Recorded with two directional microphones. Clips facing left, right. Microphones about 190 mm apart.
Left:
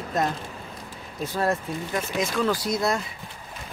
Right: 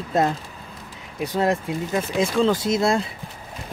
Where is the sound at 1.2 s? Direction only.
15° right (ahead or behind).